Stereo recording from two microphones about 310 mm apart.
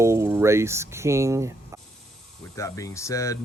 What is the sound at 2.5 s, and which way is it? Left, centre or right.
Speech, centre.